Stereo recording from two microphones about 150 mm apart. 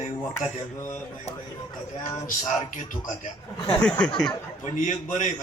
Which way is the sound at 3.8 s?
5° left (ahead or behind).